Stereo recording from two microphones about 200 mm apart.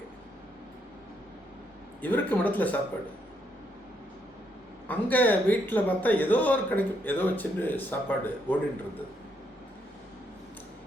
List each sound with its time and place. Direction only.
2.0 s a man's voice: 10° left (ahead or behind)
4.9 s a man's voice: 10° left (ahead or behind)